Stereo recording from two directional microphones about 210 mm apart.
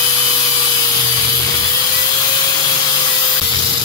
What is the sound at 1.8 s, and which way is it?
Wood, 20° left (ahead or behind).